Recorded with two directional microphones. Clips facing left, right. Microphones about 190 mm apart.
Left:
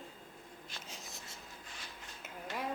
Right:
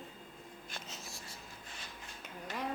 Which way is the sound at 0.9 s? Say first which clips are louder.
Right 1 dB; 20° left (ahead or behind).